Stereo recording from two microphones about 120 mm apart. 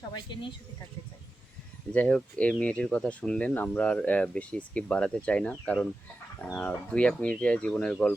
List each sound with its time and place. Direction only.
0.1 s speech: 40° left (ahead or behind)
1.9 s speech: 10° left (ahead or behind)